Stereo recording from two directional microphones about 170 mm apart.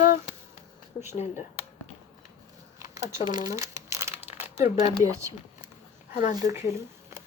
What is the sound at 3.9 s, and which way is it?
Crumpling, 15° right (ahead or behind).